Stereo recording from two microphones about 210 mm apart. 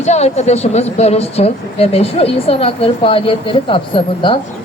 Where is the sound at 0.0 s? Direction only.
30° left (ahead or behind).